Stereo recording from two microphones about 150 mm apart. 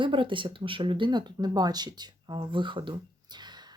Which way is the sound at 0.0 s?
35° right (ahead or behind).